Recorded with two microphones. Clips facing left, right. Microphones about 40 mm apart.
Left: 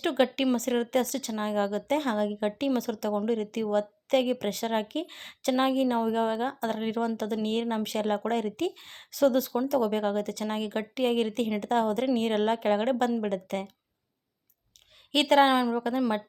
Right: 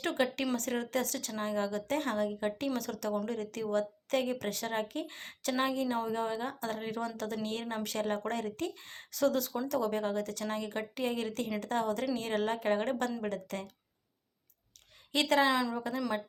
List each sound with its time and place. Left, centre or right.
0.0 s speech: left
15.1 s speech: left